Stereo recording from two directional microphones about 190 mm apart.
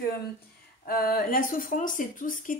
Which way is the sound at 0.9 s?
50° left (ahead or behind).